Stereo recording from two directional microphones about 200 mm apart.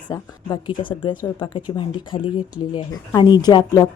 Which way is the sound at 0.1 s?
20° left (ahead or behind).